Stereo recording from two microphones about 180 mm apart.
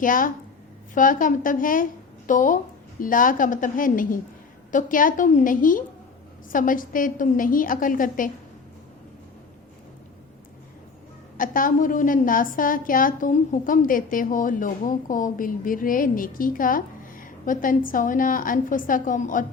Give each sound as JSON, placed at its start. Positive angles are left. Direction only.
{"t": 0.0, "sound": "a woman's voice", "side_deg": 50}
{"t": 11.3, "sound": "a woman's voice", "side_deg": 50}